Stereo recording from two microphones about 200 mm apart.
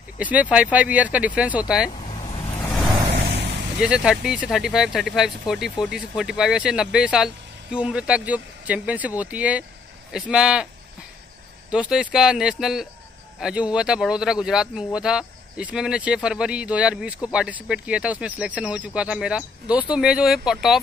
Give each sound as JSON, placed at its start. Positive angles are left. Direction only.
{"t": 0.2, "sound": "speech", "side_deg": -5}
{"t": 1.9, "sound": "vehicle", "side_deg": 30}
{"t": 3.1, "sound": "vehicle", "side_deg": -60}
{"t": 3.8, "sound": "speech", "side_deg": -5}
{"t": 11.7, "sound": "speech", "side_deg": -5}